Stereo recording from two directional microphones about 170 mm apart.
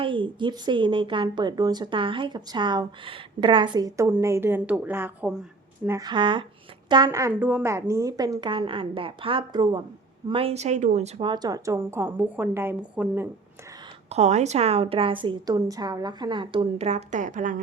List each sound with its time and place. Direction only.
0.0 s a woman's voice: 30° right (ahead or behind); by 5.9 s 5° right (ahead or behind)
5.9 s a woman's voice: 25° right (ahead or behind); by 11.1 s 45° right (ahead or behind)
11.2 s a woman's voice: 25° right (ahead or behind); by 13.2 s 10° right (ahead or behind)
14.1 s a woman's voice: 40° right (ahead or behind)